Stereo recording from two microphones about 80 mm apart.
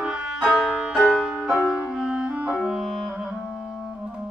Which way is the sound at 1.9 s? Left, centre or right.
Centre.